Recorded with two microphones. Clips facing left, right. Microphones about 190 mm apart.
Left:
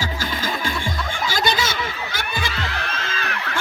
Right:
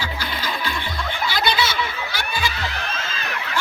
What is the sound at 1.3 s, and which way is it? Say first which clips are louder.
Snicker: even; 45° left (ahead or behind).